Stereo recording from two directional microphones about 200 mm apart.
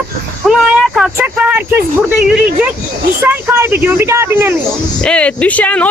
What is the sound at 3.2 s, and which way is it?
Speech, 15° right (ahead or behind).